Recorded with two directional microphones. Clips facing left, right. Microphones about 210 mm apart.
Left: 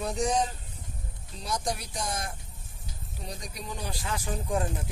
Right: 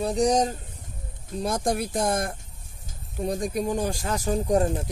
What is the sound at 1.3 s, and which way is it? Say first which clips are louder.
Speech: right 7 dB; 55° right (ahead or behind).